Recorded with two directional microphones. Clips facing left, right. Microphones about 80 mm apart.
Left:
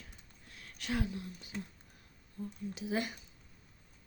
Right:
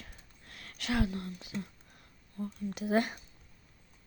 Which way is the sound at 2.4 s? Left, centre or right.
Right.